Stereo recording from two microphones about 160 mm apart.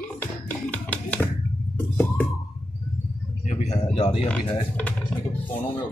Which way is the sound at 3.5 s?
45° left (ahead or behind).